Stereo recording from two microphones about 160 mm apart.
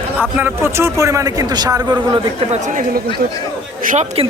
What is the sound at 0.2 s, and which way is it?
A man's voice, 10° right (ahead or behind).